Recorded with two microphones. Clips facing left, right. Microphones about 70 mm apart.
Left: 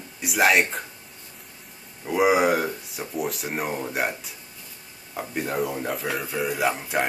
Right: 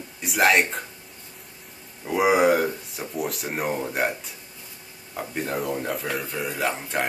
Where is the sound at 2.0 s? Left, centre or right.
Centre.